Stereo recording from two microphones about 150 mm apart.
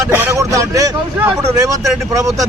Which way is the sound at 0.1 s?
15° right (ahead or behind).